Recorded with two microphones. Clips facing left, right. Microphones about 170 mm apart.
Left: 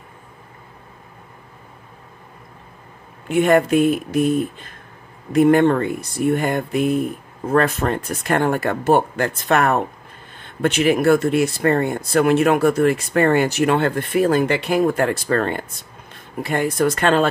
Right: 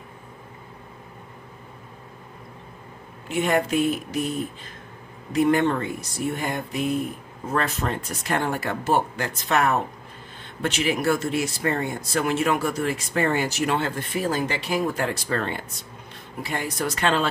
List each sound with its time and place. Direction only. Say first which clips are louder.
3.3 s speech: left 7 dB; 55° left (ahead or behind)